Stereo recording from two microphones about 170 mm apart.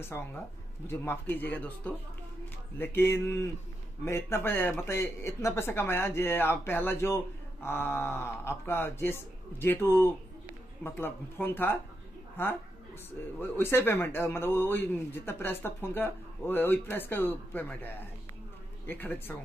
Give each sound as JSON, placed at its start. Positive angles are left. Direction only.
{"t": 0.8, "sound": "speech", "side_deg": 15}